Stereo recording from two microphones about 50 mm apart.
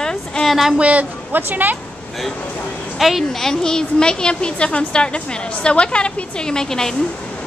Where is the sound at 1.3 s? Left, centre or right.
Right.